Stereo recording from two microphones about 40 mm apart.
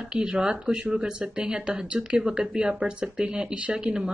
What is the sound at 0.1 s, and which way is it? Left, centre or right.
A woman's voice, right.